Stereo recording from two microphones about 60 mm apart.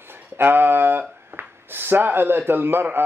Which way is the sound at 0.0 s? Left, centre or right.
Right.